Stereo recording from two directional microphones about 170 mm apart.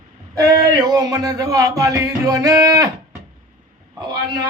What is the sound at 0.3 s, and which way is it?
Speech, 20° right (ahead or behind).